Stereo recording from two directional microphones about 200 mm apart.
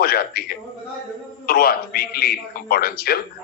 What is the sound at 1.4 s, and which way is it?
A man's voice, 50° left (ahead or behind).